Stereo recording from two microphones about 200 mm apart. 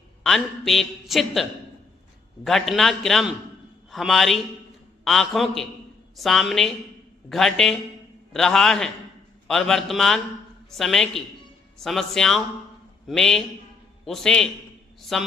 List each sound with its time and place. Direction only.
0.2 s a man's voice: centre (ahead or behind)